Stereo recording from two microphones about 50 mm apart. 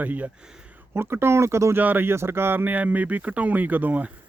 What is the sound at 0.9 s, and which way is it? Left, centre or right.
Speech, right.